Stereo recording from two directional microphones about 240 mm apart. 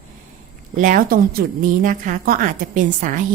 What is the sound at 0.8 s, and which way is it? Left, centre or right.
A woman's voice, right.